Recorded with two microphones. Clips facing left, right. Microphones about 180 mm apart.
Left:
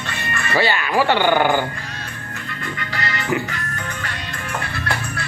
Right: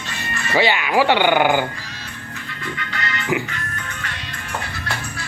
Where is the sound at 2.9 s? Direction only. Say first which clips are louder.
Left 4 dB; 35° left (ahead or behind).